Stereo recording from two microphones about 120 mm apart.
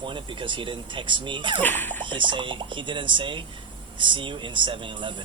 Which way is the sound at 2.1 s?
40° right (ahead or behind).